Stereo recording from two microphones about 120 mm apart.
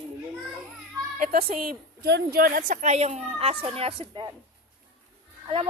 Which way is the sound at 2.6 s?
85° right.